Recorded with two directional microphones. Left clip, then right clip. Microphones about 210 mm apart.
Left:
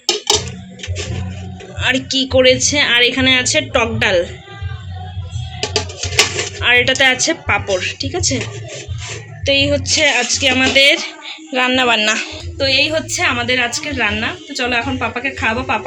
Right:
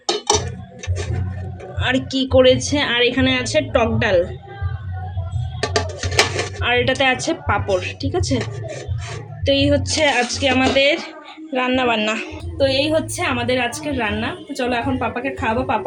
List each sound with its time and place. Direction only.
0.0 s a sound: 10° right (ahead or behind)
1.8 s speech: 10° right (ahead or behind)
5.7 s dishes: 5° right (ahead or behind)
9.5 s speech: 15° right (ahead or behind)